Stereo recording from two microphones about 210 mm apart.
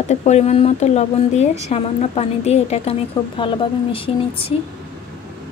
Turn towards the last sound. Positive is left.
turn(degrees=25)  # may be behind; listen again after turning